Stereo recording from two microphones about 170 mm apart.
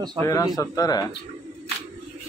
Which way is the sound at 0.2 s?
20° left (ahead or behind).